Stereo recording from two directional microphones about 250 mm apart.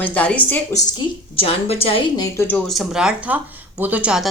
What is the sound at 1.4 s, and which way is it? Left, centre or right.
A woman's voice, left.